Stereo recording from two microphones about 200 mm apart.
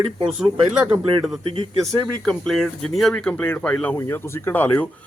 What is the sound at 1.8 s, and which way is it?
Speech, centre (ahead or behind).